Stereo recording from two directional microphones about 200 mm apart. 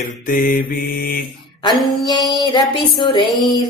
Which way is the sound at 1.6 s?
20° left (ahead or behind).